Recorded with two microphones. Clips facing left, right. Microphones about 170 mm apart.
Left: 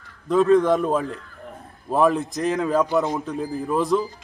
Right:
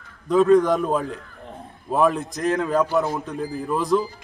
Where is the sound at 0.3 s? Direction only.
Centre (ahead or behind).